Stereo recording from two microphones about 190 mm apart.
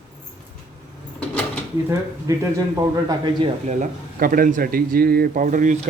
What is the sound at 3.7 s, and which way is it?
Speech, 45° right (ahead or behind).